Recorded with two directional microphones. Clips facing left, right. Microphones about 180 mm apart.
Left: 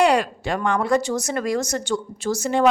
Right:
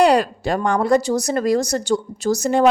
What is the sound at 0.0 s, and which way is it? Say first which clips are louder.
A woman's voice: right 3 dB; 35° right (ahead or behind).